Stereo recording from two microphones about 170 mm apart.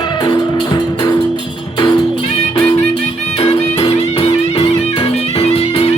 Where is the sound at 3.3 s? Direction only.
35° left (ahead or behind).